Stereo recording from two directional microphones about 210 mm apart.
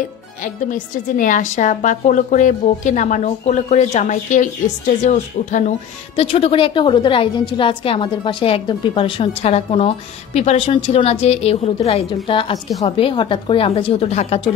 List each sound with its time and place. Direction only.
0.4 s a woman's voice: 40° left (ahead or behind)